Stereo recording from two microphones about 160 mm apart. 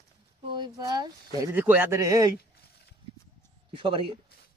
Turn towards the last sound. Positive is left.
turn(degrees=-35)  # may be behind; listen again after turning